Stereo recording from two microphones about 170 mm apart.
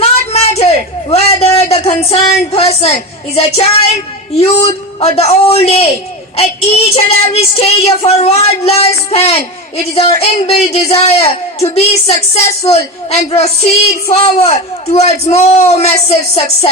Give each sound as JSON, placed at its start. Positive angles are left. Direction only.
{"t": 0.0, "sound": "a sound", "side_deg": 40}
{"t": 1.1, "sound": "speech", "side_deg": 35}
{"t": 3.3, "sound": "child singing", "side_deg": 35}